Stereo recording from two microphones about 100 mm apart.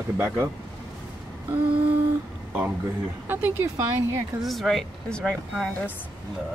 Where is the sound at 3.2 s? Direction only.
20° right (ahead or behind).